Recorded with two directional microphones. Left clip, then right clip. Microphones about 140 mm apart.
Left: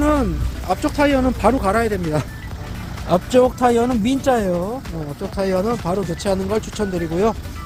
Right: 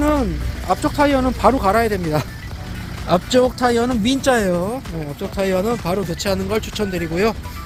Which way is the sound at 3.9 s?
5° left (ahead or behind).